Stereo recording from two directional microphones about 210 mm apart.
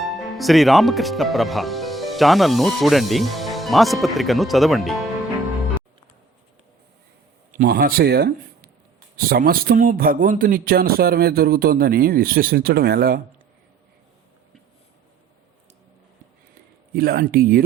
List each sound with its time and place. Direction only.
0.0 s speech: centre (ahead or behind)
7.5 s a man's voice: 45° right (ahead or behind)
16.9 s speech: 45° right (ahead or behind)